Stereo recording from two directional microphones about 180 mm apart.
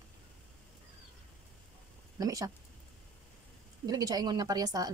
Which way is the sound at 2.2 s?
20° right (ahead or behind).